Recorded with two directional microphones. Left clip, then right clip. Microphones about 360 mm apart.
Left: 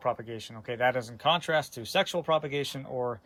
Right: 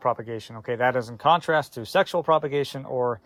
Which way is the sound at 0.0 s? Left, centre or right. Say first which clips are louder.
Right 6 dB; centre.